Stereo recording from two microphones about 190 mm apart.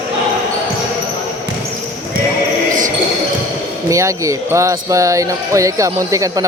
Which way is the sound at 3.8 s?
15° right (ahead or behind).